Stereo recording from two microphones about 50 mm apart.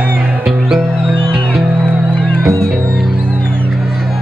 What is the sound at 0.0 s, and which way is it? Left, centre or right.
Music, right.